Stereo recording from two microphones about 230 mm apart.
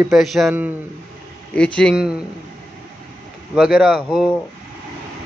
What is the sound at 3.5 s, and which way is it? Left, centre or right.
Speech, centre.